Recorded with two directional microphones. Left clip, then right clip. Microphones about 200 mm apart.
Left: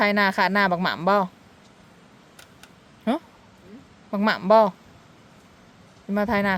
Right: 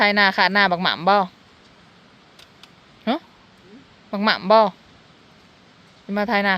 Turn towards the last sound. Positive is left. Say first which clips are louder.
# right 3 dB
turn(degrees=5)  # may be behind; listen again after turning